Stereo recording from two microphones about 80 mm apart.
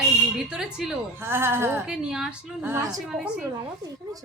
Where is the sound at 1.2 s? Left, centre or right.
Right.